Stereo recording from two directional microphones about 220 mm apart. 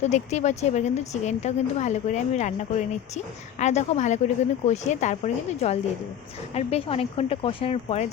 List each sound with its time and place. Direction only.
0.0 s speech: 30° left (ahead or behind)